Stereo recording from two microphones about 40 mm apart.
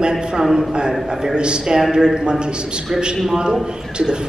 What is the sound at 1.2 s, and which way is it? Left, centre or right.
A man's voice, right.